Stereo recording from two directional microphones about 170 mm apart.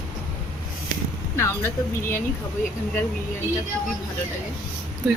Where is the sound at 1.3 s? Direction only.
15° left (ahead or behind).